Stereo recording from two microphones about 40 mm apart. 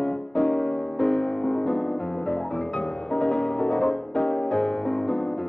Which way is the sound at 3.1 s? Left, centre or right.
Centre.